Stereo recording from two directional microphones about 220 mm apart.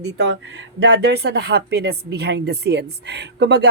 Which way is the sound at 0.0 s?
50° right (ahead or behind).